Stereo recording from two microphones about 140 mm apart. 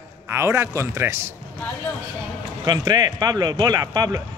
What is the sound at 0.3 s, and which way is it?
Speech, 20° right (ahead or behind).